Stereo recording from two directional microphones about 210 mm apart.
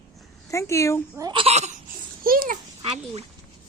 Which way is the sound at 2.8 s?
30° right (ahead or behind).